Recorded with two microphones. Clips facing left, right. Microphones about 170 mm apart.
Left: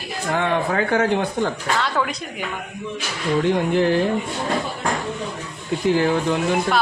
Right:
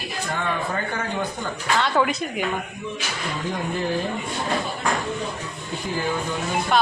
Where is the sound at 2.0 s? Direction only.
5° right (ahead or behind).